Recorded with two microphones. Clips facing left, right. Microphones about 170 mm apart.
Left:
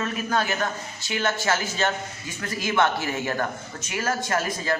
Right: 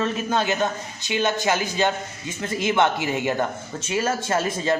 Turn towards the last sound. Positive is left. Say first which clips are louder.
# right 3 dB
turn(degrees=-25)  # may be behind; listen again after turning